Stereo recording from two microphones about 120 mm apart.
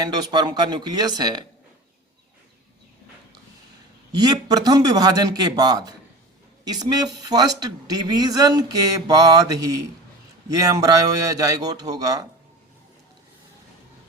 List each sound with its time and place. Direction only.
0.0 s a woman's voice: 35° right (ahead or behind)
4.1 s a woman's voice: 35° right (ahead or behind)